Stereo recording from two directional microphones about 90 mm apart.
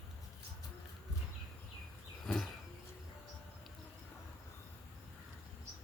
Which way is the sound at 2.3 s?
Centre (ahead or behind).